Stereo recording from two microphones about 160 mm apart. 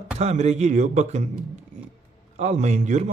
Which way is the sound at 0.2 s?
45° right (ahead or behind).